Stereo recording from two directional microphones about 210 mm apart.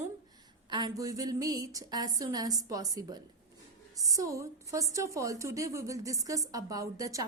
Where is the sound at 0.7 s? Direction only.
20° right (ahead or behind).